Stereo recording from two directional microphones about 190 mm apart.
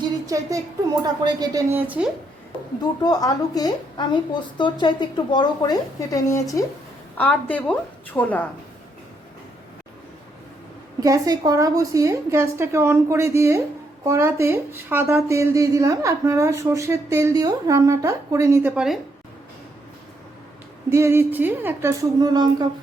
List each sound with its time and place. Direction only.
0.0 s a sound: 15° right (ahead or behind)
1.2 s speech: 20° right (ahead or behind)
3.0 s a woman's voice: 20° left (ahead or behind)
11.0 s a woman's voice: 20° right (ahead or behind)
20.9 s a woman's voice: 10° right (ahead or behind)